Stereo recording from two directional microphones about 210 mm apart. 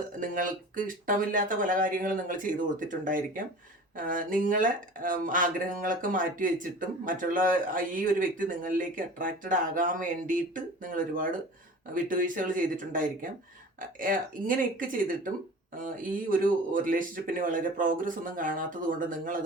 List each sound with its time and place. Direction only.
0.2 s speech: 40° right (ahead or behind)